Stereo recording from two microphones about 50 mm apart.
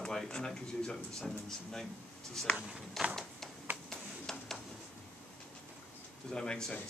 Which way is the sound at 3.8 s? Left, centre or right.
Centre.